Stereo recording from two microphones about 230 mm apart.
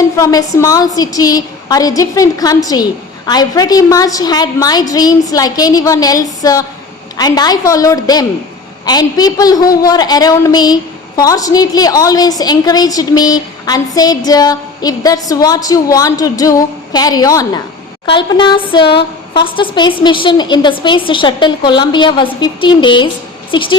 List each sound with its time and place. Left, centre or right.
0.2 s a woman's voice: centre